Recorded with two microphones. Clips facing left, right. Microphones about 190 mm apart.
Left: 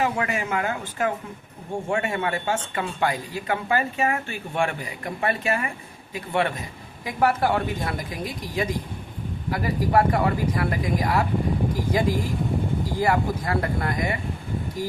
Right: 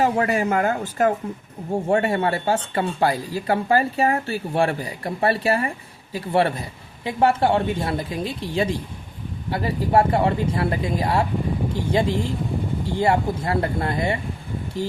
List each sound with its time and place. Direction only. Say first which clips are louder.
0.0 s speech: right 5 dB; 35° right (ahead or behind)